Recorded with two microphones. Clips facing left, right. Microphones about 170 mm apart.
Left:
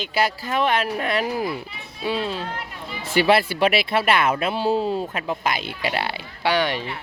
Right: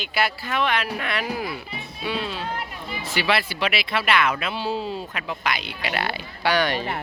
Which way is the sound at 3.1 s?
50° left (ahead or behind).